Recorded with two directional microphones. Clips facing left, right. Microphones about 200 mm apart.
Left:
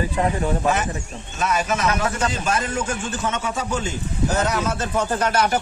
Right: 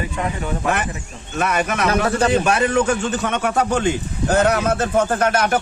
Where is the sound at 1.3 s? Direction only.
60° right (ahead or behind).